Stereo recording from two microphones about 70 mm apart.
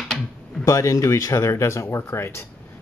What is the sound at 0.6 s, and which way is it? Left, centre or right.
Speech, left.